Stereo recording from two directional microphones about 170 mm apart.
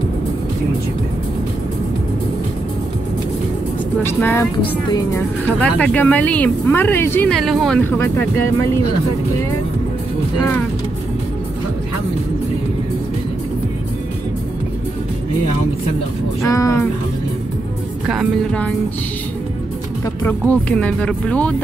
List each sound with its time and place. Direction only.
4.0 s speech: 15° left (ahead or behind)
7.8 s speech: 15° left (ahead or behind)
16.4 s speech: 20° left (ahead or behind)
18.0 s speech: centre (ahead or behind)
20.2 s speech: 10° left (ahead or behind)